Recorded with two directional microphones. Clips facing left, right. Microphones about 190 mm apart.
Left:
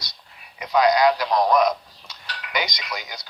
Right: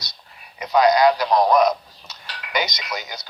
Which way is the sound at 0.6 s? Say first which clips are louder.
Right 2 dB; 35° right (ahead or behind).